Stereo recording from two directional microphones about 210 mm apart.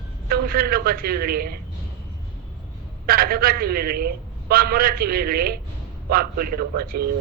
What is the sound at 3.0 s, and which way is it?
A man's voice, 45° right (ahead or behind).